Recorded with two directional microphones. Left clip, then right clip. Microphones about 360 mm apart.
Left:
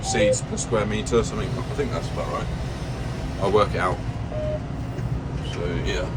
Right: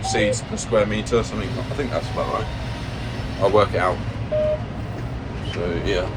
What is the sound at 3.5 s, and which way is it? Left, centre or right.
Speech, centre.